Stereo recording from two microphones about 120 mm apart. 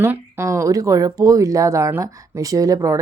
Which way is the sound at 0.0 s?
20° right (ahead or behind).